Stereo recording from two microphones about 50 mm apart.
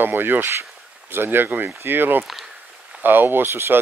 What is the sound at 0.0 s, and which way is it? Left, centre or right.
Speech, right.